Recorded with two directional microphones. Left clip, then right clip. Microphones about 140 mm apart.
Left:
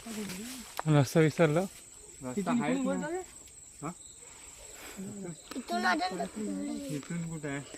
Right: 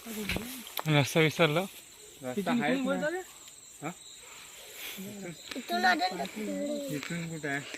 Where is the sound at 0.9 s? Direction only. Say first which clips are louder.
Right 1 dB; 50° left (ahead or behind).